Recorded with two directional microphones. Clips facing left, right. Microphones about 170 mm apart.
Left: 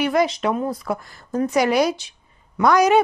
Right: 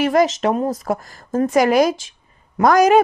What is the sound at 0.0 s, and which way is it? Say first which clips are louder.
Speech: right 3 dB; 45° right (ahead or behind).